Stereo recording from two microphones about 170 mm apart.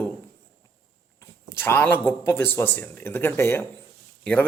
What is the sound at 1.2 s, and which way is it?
A man's voice, 15° left (ahead or behind).